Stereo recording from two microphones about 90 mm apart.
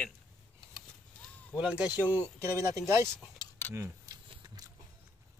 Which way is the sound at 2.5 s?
35° right (ahead or behind).